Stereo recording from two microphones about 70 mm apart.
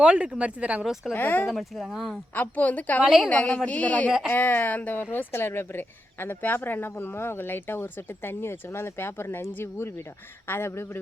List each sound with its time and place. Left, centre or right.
0.0 s speech: centre
1.1 s speech: left
1.5 s speech: centre
2.3 s speech: left
3.0 s speech: centre
3.2 s a woman's voice: centre
5.1 s a woman's voice: left